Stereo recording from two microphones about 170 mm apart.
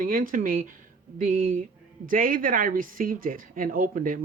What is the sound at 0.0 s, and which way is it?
Speech, 55° right (ahead or behind).